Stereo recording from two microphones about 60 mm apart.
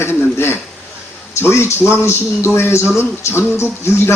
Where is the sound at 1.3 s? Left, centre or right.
Left.